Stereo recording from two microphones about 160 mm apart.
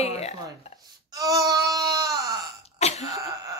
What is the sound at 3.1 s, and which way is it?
Throat clearing, 20° right (ahead or behind).